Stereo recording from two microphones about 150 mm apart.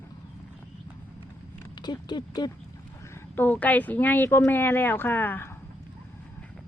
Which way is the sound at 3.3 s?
10° left (ahead or behind).